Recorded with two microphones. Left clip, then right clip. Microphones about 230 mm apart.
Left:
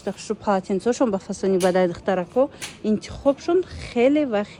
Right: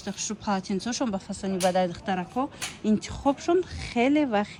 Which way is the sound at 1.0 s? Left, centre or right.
Left.